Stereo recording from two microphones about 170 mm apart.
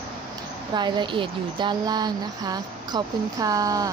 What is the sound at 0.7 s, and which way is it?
Speech, 25° right (ahead or behind).